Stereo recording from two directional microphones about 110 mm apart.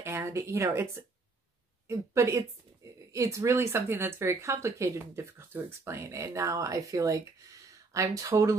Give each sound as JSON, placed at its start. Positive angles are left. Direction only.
{"t": 0.0, "sound": "speech", "side_deg": -25}